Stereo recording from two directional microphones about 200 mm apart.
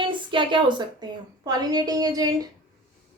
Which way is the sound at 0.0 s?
25° right (ahead or behind).